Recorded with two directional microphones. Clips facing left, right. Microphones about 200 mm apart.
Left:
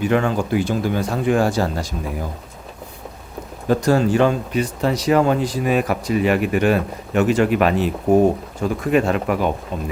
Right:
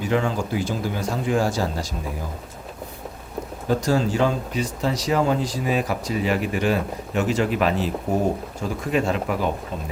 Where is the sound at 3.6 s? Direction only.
60° left (ahead or behind).